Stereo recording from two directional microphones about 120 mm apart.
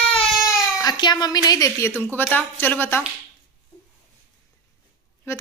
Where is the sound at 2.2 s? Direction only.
15° left (ahead or behind).